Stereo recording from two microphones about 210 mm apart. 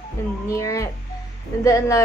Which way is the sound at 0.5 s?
15° left (ahead or behind).